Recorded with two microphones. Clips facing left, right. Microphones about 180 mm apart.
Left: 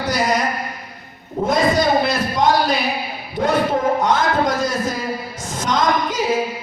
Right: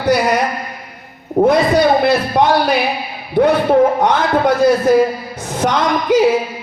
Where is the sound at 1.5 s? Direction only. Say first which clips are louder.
Right 4 dB; 60° right (ahead or behind).